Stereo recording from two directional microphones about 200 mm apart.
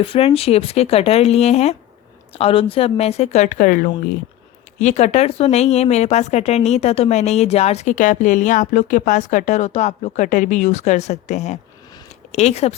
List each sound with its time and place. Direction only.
0.0 s speech: 25° left (ahead or behind)